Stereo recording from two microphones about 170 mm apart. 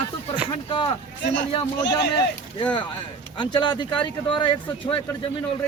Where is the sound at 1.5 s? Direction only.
25° left (ahead or behind).